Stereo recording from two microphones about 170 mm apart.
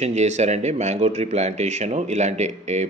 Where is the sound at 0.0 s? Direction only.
40° right (ahead or behind).